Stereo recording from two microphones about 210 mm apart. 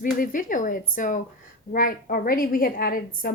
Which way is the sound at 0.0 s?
40° left (ahead or behind).